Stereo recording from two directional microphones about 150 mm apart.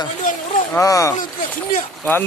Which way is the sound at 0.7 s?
20° left (ahead or behind).